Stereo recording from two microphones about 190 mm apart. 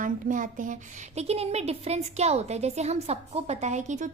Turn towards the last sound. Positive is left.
turn(degrees=-40)  # may be behind; listen again after turning